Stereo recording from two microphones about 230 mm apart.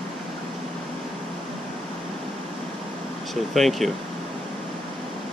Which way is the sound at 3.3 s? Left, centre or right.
Centre.